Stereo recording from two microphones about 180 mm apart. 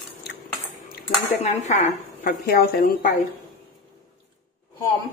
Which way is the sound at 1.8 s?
55° left (ahead or behind).